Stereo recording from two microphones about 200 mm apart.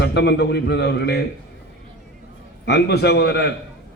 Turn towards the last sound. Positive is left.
turn(degrees=55)  # may be behind; listen again after turning